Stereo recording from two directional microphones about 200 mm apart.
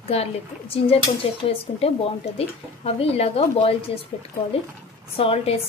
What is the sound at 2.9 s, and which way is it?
A woman's voice, 30° left (ahead or behind).